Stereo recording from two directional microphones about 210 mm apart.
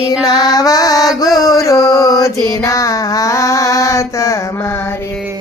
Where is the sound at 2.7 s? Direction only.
15° left (ahead or behind).